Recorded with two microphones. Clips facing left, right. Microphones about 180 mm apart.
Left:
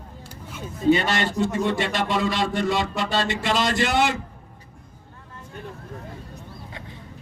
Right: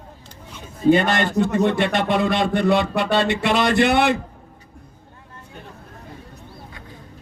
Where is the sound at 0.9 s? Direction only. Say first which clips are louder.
Right 3 dB; 55° right (ahead or behind).